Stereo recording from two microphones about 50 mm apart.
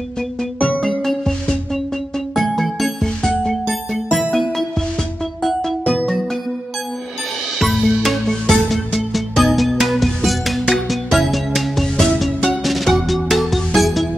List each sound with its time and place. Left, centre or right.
0.6 s music: left
0.8 s music: centre
7.5 s music: centre